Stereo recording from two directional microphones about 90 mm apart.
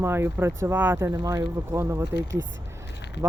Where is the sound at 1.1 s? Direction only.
45° right (ahead or behind).